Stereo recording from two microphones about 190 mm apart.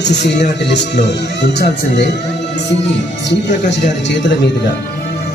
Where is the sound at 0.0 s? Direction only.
65° left (ahead or behind).